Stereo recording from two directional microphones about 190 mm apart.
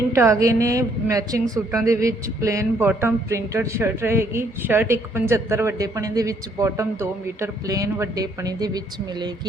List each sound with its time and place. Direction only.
0.1 s a woman's voice: 15° right (ahead or behind)